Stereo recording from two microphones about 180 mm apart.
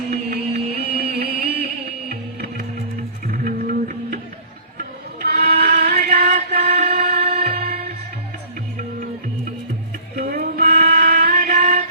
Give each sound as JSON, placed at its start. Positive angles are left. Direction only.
{"t": 0.1, "sound": "music", "side_deg": -60}
{"t": 10.2, "sound": "music", "side_deg": -55}
{"t": 10.7, "sound": "a sound", "side_deg": -40}
{"t": 11.0, "sound": "music", "side_deg": -50}